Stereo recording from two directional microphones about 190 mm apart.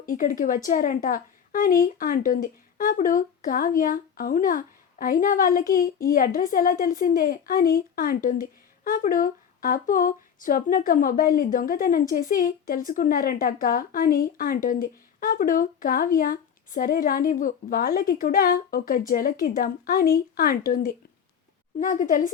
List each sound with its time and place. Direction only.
0.0 s a woman's voice: 45° left (ahead or behind)